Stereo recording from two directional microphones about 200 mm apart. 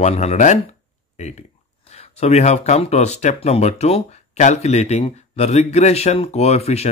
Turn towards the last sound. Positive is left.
turn(degrees=30)  # may be behind; listen again after turning